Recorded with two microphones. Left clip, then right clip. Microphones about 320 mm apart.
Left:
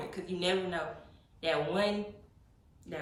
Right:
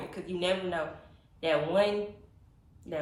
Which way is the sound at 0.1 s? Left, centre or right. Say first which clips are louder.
Right 2 dB; centre.